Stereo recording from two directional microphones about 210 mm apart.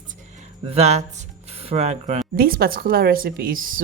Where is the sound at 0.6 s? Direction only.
30° right (ahead or behind).